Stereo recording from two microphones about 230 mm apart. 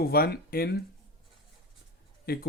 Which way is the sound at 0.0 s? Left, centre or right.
Left.